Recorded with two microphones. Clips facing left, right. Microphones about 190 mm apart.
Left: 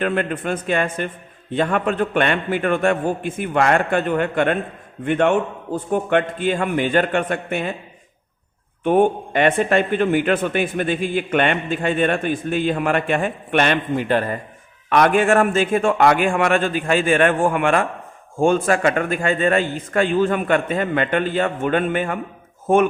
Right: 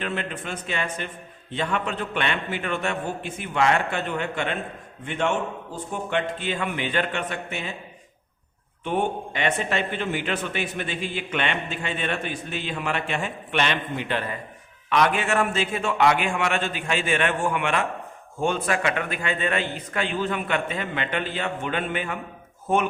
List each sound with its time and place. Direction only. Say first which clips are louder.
0.0 s a man's voice: left 9 dB; 50° left (ahead or behind)
8.8 s a man's voice: left 9 dB; 50° left (ahead or behind)